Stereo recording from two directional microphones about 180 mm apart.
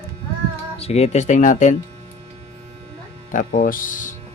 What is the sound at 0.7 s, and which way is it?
Speech, 35° left (ahead or behind).